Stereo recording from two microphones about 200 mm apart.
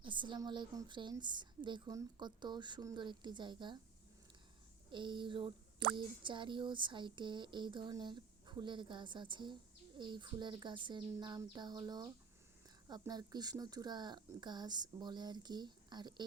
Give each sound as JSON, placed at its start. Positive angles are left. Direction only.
{"t": 0.0, "sound": "a woman's voice", "side_deg": -25}
{"t": 4.9, "sound": "a woman's voice", "side_deg": -25}